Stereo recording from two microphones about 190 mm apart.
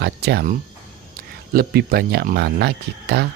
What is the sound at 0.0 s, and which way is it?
Speech, 60° right (ahead or behind).